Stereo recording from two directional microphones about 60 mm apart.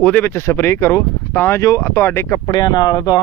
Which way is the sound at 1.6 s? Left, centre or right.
Left.